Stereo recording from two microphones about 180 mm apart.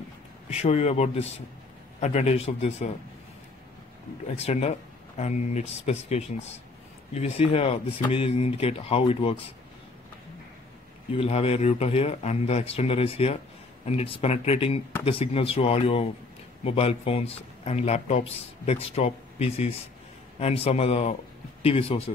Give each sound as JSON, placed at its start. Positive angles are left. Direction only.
{"t": 0.5, "sound": "speech", "side_deg": 35}
{"t": 4.4, "sound": "speech", "side_deg": 35}
{"t": 11.1, "sound": "speech", "side_deg": 35}